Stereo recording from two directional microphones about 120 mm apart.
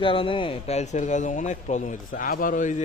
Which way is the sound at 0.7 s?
75° left (ahead or behind).